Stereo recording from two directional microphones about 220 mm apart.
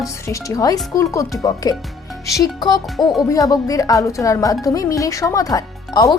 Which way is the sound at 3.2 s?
15° left (ahead or behind).